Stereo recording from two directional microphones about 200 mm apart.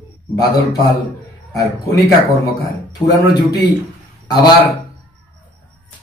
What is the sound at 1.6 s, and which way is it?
Speech, 15° left (ahead or behind).